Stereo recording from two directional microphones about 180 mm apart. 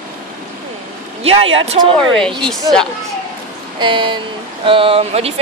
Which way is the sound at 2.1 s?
5° left (ahead or behind).